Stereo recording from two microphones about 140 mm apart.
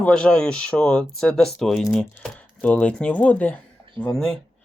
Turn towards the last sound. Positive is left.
turn(degrees=5)  # may be behind; listen again after turning